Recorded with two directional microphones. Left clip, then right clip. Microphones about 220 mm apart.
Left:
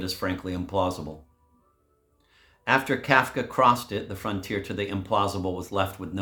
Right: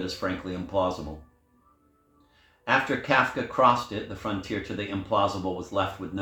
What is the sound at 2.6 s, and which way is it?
Speech, 55° left (ahead or behind).